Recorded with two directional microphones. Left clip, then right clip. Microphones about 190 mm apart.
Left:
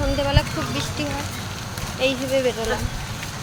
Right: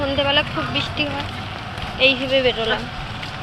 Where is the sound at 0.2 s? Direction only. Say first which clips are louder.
Right 4 dB; 5° left (ahead or behind).